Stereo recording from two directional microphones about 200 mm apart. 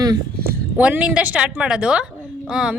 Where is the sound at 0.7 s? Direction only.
5° right (ahead or behind).